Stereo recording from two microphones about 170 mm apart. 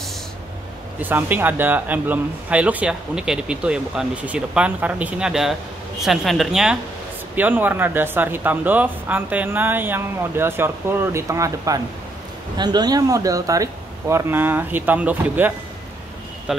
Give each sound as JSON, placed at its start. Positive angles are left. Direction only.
{"t": 0.9, "sound": "speech", "side_deg": -10}